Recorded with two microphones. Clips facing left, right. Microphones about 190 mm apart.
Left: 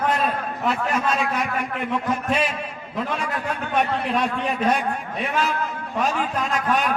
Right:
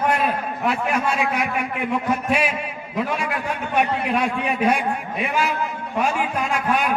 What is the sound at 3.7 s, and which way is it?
A man's voice, 10° right (ahead or behind).